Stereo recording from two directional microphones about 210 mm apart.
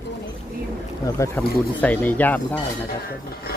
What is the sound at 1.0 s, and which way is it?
Speech, 15° left (ahead or behind).